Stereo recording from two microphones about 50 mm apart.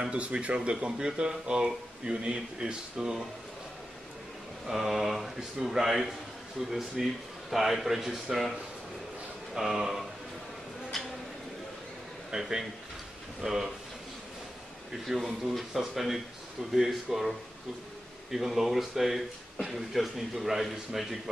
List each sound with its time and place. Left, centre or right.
0.2 s speech: right
4.6 s speech: centre
7.5 s speech: centre
12.3 s speech: centre
14.9 s speech: centre